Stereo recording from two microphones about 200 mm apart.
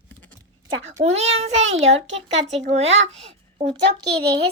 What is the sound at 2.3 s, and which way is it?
Speech, 35° right (ahead or behind).